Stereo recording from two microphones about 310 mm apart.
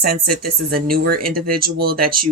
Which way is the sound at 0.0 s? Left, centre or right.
Right.